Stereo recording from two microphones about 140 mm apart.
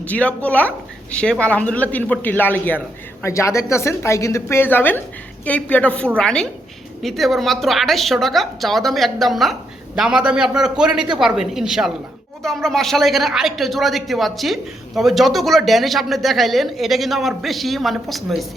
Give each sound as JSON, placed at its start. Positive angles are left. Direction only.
{"t": 0.0, "sound": "a man's voice", "side_deg": 10}